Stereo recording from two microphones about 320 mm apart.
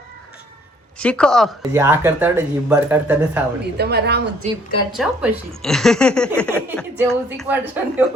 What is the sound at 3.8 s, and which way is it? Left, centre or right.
Speech, right.